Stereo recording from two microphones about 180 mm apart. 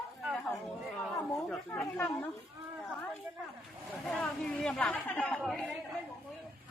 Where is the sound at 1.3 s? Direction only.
Centre (ahead or behind).